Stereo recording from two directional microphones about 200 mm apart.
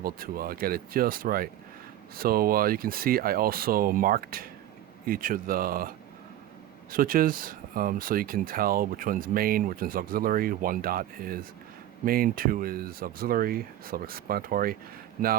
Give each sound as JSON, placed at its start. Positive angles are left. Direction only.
{"t": 0.0, "sound": "speech", "side_deg": -45}
{"t": 6.9, "sound": "speech", "side_deg": -45}